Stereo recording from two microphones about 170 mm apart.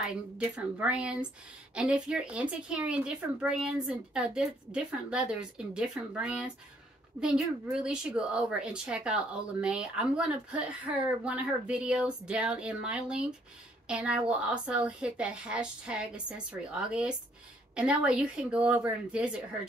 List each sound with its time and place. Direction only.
0.0 s a woman's voice: 5° right (ahead or behind)